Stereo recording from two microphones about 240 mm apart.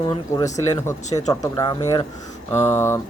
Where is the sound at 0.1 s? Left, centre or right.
Centre.